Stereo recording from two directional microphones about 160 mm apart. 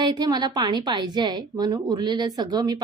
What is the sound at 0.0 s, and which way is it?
A woman's voice, 25° right (ahead or behind).